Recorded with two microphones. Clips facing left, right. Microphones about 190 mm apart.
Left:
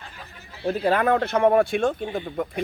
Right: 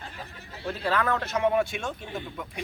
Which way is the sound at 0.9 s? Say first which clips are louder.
Left 6 dB; 50° left (ahead or behind).